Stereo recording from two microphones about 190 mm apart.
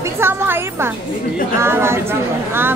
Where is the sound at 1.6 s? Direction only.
15° right (ahead or behind).